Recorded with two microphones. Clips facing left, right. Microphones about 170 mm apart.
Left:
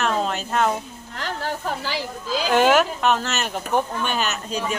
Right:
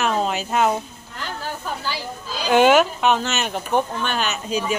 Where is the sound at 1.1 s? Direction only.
80° left.